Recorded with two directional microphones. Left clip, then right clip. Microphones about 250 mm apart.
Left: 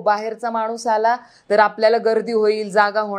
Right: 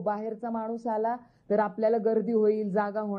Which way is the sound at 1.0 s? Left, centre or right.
Centre.